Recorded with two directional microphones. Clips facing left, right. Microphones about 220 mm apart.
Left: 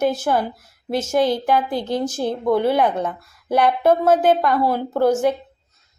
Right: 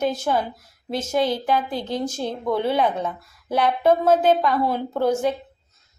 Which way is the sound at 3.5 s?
10° left (ahead or behind).